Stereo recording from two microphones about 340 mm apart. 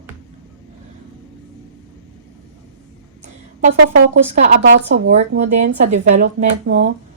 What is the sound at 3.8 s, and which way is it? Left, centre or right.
Speech, right.